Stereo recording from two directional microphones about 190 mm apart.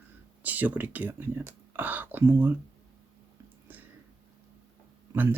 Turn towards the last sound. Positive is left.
turn(degrees=-15)  # may be behind; listen again after turning